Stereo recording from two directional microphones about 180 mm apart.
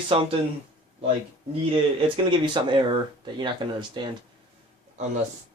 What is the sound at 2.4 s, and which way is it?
Speech, 25° right (ahead or behind).